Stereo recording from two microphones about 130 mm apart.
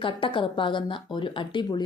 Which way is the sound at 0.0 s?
40° left (ahead or behind).